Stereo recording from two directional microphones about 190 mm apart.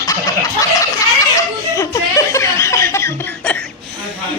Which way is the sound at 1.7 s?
15° left (ahead or behind).